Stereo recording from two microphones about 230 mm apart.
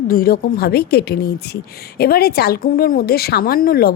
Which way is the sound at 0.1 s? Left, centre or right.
Left.